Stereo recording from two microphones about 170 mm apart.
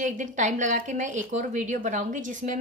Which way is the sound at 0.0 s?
45° right (ahead or behind).